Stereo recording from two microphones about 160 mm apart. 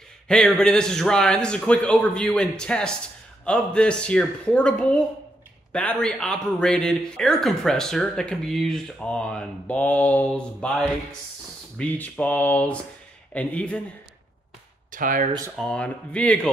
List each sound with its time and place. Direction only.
0.3 s a man's voice: 5° left (ahead or behind)
12.0 s speech: 10° left (ahead or behind)
14.9 s speech: 55° right (ahead or behind)
15.5 s speech: 5° left (ahead or behind)